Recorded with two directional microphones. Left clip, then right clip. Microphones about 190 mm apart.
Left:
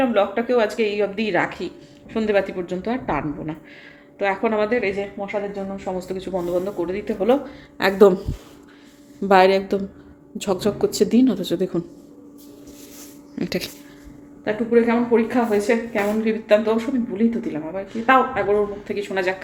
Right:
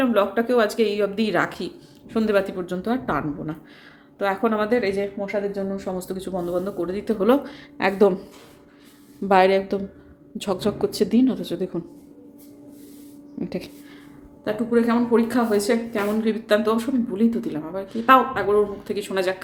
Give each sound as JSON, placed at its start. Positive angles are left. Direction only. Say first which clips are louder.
{"t": 0.0, "sound": "a woman's voice", "louder": "left 1 dB", "side_deg": -20}
{"t": 7.9, "sound": "speech", "louder": "left 5 dB", "side_deg": 5}
{"t": 9.2, "sound": "speech", "louder": "left 2 dB", "side_deg": 0}
{"t": 13.4, "sound": "speech", "louder": "left 5 dB", "side_deg": 0}
{"t": 14.4, "sound": "a woman's voice", "louder": "left 3 dB", "side_deg": -10}